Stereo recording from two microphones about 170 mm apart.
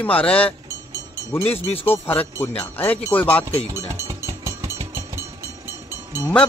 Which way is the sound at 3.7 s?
15° right (ahead or behind).